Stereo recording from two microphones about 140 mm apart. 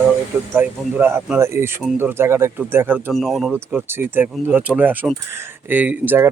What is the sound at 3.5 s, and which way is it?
Speech, 15° right (ahead or behind).